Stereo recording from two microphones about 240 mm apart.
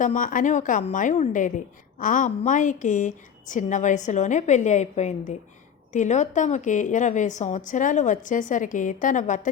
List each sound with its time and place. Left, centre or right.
0.0 s a woman's voice: left